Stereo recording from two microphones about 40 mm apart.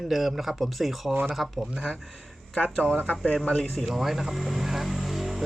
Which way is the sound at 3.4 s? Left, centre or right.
Left.